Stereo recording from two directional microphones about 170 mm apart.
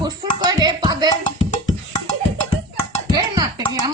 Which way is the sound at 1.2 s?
25° left (ahead or behind).